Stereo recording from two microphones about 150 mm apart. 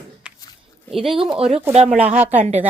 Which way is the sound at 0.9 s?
Centre (ahead or behind).